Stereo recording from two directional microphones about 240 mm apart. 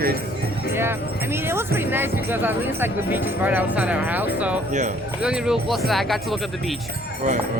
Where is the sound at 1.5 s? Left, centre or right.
Centre.